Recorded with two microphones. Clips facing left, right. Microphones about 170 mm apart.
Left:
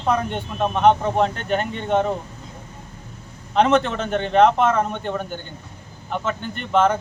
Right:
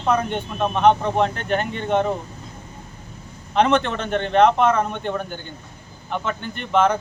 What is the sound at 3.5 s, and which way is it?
Speech, centre (ahead or behind).